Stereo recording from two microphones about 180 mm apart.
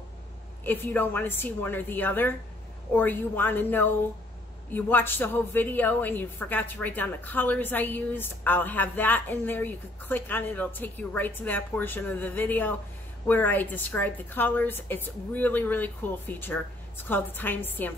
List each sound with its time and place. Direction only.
0.7 s a woman's voice: 10° left (ahead or behind)